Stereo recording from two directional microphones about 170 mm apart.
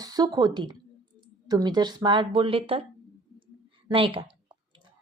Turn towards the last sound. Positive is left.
turn(degrees=-30)  # may be behind; listen again after turning